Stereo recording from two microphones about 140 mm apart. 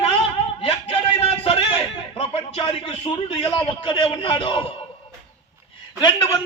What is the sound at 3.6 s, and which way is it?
A man's voice, 40° left (ahead or behind).